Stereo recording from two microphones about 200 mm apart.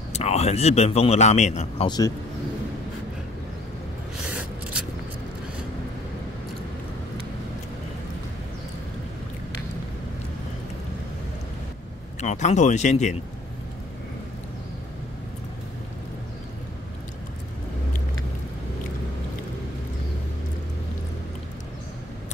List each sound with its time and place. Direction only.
0.1 s speech: 35° left (ahead or behind)
1.9 s speech: 20° left (ahead or behind)
12.2 s speech: 35° left (ahead or behind)